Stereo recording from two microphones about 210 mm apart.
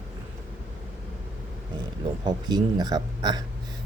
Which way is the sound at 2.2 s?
20° right (ahead or behind).